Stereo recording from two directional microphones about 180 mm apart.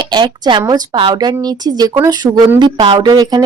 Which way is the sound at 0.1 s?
25° right (ahead or behind).